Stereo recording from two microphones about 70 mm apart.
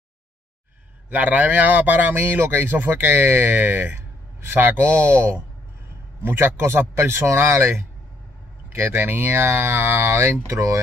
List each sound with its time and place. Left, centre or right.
1.1 s speech: right